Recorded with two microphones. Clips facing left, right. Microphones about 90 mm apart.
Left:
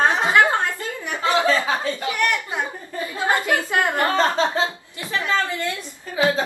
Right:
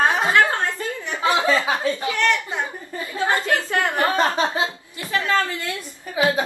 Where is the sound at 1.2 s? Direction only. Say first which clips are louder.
Even; 15° right (ahead or behind).